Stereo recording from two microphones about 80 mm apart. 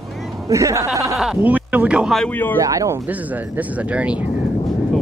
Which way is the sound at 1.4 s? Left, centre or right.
Centre.